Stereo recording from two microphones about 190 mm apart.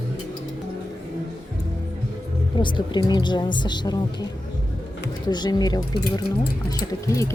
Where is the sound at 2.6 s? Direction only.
25° left (ahead or behind).